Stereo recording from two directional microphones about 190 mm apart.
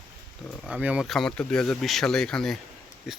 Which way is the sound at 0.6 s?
5° right (ahead or behind).